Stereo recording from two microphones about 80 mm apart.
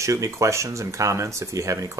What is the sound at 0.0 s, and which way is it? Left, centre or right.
Speech, right.